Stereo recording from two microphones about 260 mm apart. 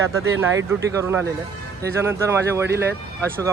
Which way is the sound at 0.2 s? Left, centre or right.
Right.